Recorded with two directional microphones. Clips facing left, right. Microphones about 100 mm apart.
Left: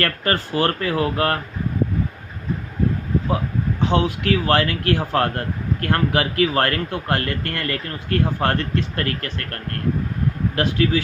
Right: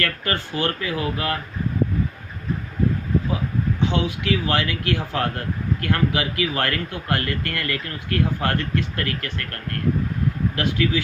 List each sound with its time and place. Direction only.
0.0 s speech: 40° left (ahead or behind)
3.8 s speech: 40° left (ahead or behind)
10.5 s speech: 35° left (ahead or behind)